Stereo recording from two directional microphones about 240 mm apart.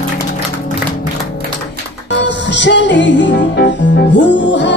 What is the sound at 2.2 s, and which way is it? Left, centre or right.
Music, left.